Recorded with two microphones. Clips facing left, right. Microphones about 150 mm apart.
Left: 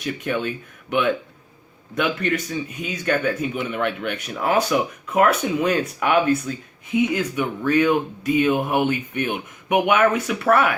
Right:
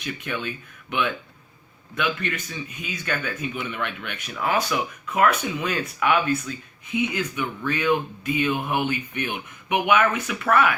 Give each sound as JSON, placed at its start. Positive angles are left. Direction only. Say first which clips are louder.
{"t": 0.0, "sound": "speech", "louder": "left 6 dB", "side_deg": 45}